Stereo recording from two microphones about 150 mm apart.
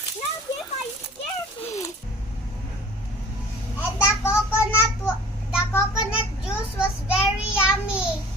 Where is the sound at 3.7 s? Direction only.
15° left (ahead or behind).